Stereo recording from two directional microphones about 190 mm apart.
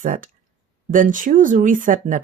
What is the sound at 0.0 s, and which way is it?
Speech, 45° right (ahead or behind).